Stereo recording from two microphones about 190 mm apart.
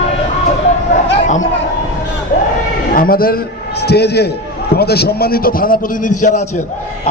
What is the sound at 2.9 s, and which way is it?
A man's voice, 50° left (ahead or behind).